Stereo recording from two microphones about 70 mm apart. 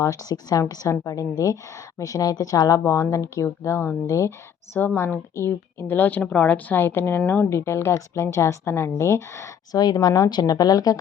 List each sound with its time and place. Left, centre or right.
0.0 s speech: left
2.8 s speech: left
4.9 s speech: left
9.7 s speech: left